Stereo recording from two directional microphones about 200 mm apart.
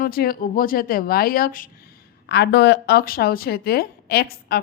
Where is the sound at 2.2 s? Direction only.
55° left (ahead or behind).